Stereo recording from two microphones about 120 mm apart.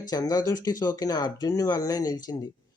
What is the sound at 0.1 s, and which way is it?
Speech, 30° left (ahead or behind).